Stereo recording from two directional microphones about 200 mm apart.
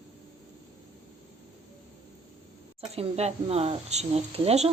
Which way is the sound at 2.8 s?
30° right (ahead or behind).